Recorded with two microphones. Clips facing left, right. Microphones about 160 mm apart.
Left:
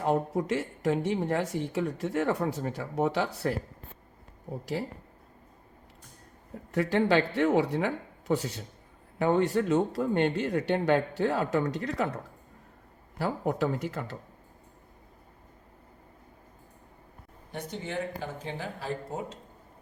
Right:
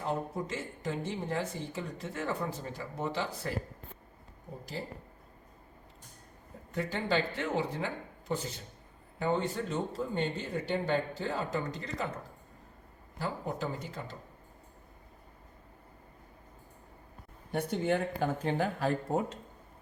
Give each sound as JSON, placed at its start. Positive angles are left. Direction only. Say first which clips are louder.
{"t": 0.0, "sound": "speech", "louder": "left 7 dB", "side_deg": 75}
{"t": 6.7, "sound": "speech", "louder": "left 7 dB", "side_deg": 80}
{"t": 17.5, "sound": "speech", "louder": "right 5 dB", "side_deg": -55}